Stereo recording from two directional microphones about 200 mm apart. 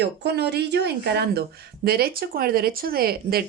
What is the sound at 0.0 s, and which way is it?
Speech, 55° right (ahead or behind).